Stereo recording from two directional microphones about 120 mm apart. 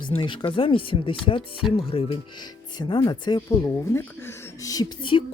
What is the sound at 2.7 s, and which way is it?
Speech, 35° left (ahead or behind).